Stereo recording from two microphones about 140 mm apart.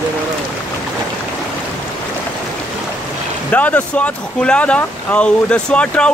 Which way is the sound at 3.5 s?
10° left (ahead or behind).